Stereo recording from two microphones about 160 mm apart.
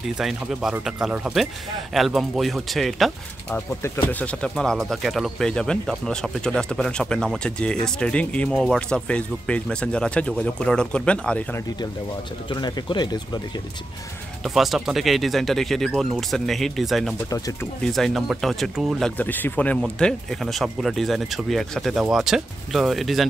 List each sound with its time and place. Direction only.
0.2 s speech: centre (ahead or behind)
3.5 s speech: 15° left (ahead or behind)
12.4 s speech: 30° left (ahead or behind)
14.4 s speech: centre (ahead or behind)